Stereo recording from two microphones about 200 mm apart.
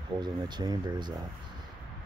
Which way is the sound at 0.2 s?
20° right (ahead or behind).